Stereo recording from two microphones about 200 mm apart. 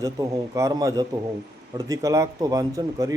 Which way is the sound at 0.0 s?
15° right (ahead or behind).